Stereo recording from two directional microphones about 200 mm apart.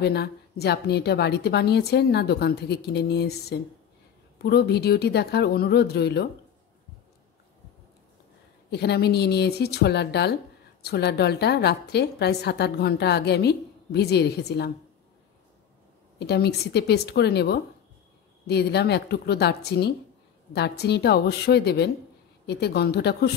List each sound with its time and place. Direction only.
0.0 s a woman's voice: 55° left (ahead or behind)
8.6 s a woman's voice: 55° left (ahead or behind)
16.2 s a woman's voice: 55° left (ahead or behind)